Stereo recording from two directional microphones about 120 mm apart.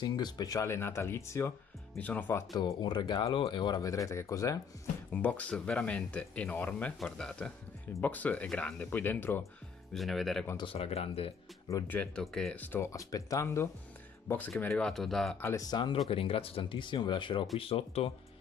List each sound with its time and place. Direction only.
0.0 s speech: 35° left (ahead or behind); by 2.4 s 15° left (ahead or behind)
2.8 s speech: 40° left (ahead or behind)
5.1 s speech: 15° left (ahead or behind)
9.9 s speech: centre (ahead or behind)
10.6 s speech: 50° left (ahead or behind)
11.9 s speech: 10° left (ahead or behind)
12.5 s speech: 15° left (ahead or behind)
12.9 s speech: 25° left (ahead or behind)
14.7 s speech: 5° left (ahead or behind)
15.4 s speech: 30° left (ahead or behind)
16.1 s speech: 50° left (ahead or behind)